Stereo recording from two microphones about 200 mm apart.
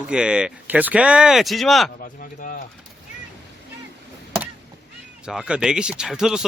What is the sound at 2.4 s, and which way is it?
Speech, 40° left (ahead or behind).